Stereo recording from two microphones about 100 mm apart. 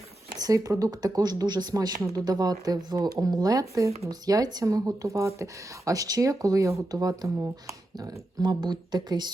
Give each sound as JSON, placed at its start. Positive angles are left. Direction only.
{"t": 0.3, "sound": "speech", "side_deg": -40}